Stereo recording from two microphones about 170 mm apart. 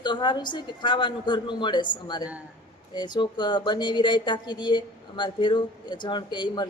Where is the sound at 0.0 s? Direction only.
25° left (ahead or behind).